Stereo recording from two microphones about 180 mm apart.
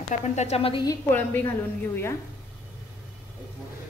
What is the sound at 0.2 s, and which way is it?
Speech, 40° left (ahead or behind).